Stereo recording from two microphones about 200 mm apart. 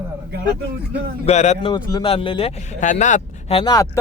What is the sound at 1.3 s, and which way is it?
Speech, 35° left (ahead or behind).